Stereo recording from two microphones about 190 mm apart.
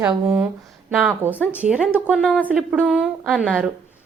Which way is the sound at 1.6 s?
5° right (ahead or behind).